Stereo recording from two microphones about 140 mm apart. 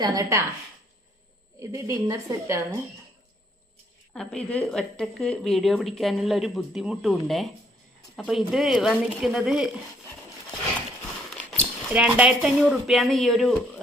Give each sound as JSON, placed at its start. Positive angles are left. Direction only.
{"t": 0.0, "sound": "a woman's voice", "side_deg": -25}
{"t": 1.5, "sound": "a woman's voice", "side_deg": -20}
{"t": 4.1, "sound": "a woman's voice", "side_deg": 5}
{"t": 11.9, "sound": "a woman's voice", "side_deg": -10}